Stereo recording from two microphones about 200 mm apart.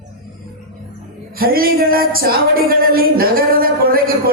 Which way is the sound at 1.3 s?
50° right (ahead or behind).